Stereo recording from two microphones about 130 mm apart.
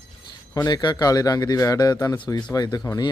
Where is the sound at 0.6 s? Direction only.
30° left (ahead or behind).